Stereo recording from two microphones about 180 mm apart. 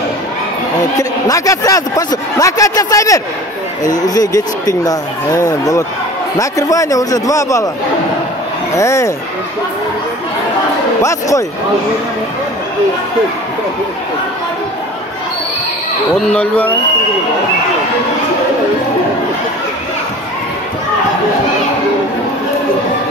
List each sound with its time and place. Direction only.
0.9 s a man's voice: 20° left (ahead or behind)
8.7 s speech: 15° left (ahead or behind)
11.0 s speech: 20° left (ahead or behind)
16.3 s speech: 10° left (ahead or behind)